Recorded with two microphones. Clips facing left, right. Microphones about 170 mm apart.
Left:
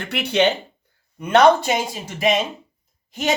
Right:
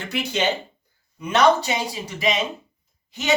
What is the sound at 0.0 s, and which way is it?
Speech, 65° left (ahead or behind).